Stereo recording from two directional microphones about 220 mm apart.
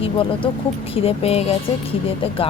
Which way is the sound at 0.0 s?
25° left (ahead or behind).